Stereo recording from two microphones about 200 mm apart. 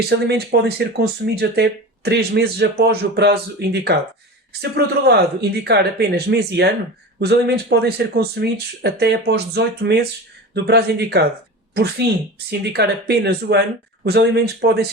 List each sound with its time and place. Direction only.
0.1 s speech: 55° right (ahead or behind)
12.5 s speech: 55° right (ahead or behind)